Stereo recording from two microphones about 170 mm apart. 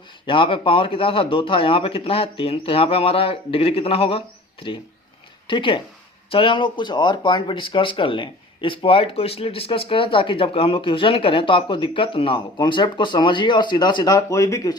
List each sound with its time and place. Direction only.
0.3 s speech: 30° left (ahead or behind)
5.5 s speech: 30° left (ahead or behind)